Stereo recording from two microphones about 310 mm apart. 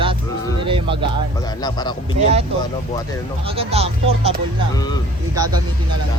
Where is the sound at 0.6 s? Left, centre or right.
Centre.